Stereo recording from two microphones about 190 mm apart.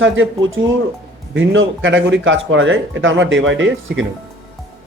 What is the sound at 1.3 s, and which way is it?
Speech, 80° right.